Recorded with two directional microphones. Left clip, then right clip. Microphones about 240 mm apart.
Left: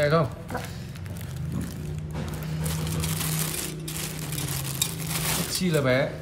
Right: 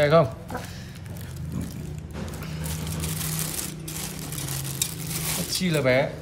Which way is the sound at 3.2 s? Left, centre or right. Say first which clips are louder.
Left 1 dB; centre.